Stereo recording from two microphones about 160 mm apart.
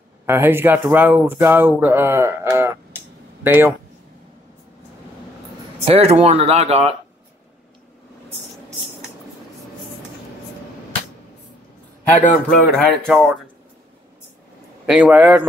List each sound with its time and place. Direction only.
0.3 s speech: 15° right (ahead or behind)
5.9 s speech: 40° right (ahead or behind)
12.2 s a man's voice: 55° left (ahead or behind)
12.6 s speech: centre (ahead or behind)
14.9 s speech: 10° right (ahead or behind)